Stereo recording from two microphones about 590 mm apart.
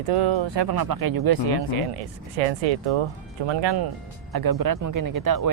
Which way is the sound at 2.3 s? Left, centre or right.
Right.